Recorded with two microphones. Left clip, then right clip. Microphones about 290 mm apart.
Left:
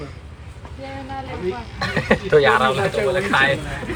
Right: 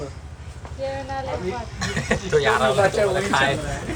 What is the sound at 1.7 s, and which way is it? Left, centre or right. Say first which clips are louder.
A man's voice: left 6 dB; centre.